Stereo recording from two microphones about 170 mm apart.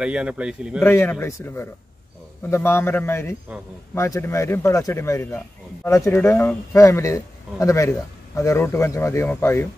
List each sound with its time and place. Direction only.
0.0 s a man's voice: 5° right (ahead or behind)
0.8 s speech: 15° left (ahead or behind)